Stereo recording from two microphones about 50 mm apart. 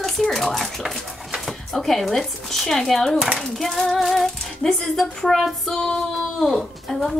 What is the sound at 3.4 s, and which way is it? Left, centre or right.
Music, centre.